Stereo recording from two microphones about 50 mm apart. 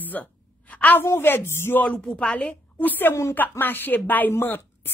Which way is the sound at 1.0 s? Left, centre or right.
Left.